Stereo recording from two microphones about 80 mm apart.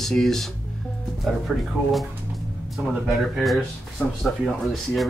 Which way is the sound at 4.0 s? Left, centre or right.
Left.